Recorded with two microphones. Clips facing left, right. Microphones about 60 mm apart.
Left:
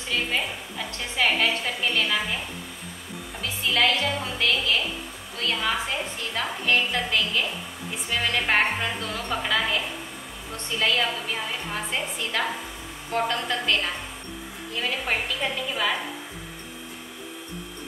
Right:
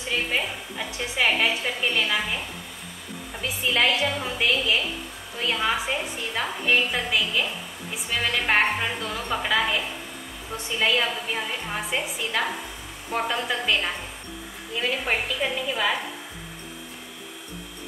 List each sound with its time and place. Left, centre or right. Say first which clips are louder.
0.4 s a woman's voice: right 1 dB; centre
3.7 s a woman's voice: even; centre